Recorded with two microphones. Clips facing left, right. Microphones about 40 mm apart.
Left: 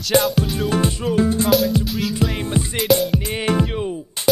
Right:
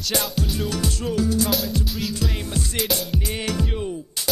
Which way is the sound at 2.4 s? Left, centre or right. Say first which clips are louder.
Left 6 dB; left.